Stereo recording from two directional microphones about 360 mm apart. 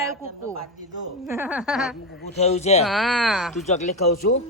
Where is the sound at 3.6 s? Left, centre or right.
Centre.